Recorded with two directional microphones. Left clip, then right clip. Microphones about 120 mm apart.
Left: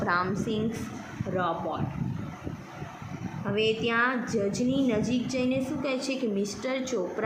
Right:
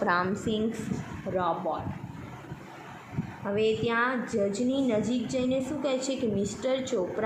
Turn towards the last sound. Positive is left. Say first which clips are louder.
# right 2 dB
turn(degrees=-15)  # may be behind; listen again after turning